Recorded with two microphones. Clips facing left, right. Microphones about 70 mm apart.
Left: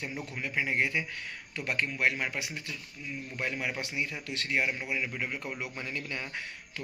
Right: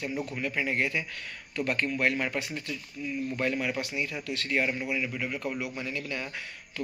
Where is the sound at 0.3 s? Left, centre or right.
Centre.